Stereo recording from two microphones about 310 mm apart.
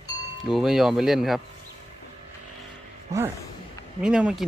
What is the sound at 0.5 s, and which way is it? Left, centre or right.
Speech, centre.